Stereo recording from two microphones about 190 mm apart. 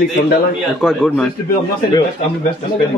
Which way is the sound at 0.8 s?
Centre (ahead or behind).